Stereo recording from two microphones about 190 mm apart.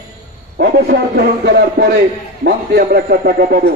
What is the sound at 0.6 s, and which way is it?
Speech, 60° right (ahead or behind).